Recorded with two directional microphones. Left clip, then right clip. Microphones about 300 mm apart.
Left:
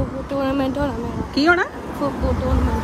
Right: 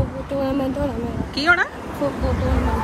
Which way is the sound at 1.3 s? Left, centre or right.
Left.